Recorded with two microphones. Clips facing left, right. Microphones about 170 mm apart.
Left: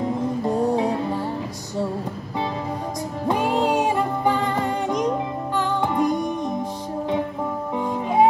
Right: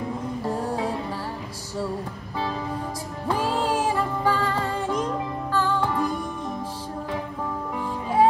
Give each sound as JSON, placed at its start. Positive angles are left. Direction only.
{"t": 3.3, "sound": "music", "side_deg": 20}
{"t": 7.7, "sound": "music", "side_deg": 20}